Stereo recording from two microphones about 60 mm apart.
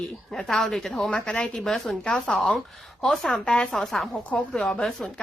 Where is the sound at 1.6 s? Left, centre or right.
Centre.